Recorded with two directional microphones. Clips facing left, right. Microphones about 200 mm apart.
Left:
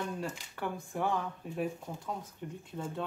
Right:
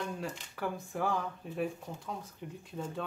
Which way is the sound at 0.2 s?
Centre (ahead or behind).